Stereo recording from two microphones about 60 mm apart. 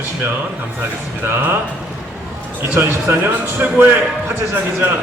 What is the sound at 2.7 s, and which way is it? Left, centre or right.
Speech, right.